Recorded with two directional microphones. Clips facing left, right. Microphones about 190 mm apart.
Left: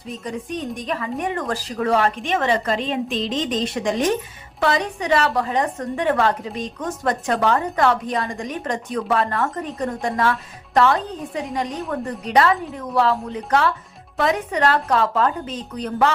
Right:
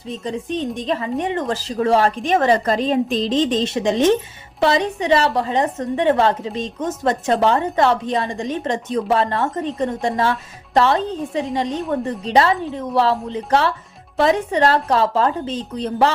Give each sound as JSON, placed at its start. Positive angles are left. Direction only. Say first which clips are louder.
{"t": 0.1, "sound": "a woman's voice", "louder": "right 4 dB", "side_deg": -25}